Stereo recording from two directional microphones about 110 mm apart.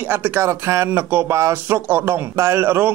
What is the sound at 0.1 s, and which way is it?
Speech, 20° right (ahead or behind).